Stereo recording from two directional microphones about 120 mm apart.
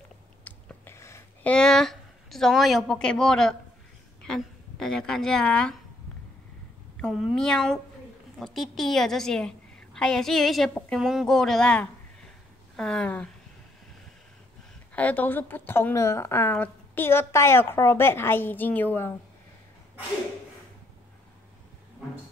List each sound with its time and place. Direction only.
0.5 s a sound: 15° left (ahead or behind)
1.4 s a woman's voice: 10° left (ahead or behind)
7.0 s a woman's voice: centre (ahead or behind)
15.0 s a woman's voice: 15° left (ahead or behind)